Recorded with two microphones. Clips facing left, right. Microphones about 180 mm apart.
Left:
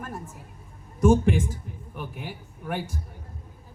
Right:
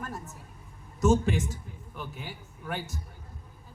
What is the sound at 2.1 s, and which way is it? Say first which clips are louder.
Speech: left 4 dB; 65° left (ahead or behind).